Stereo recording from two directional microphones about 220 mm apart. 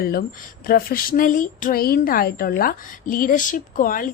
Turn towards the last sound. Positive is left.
turn(degrees=40)  # may be behind; listen again after turning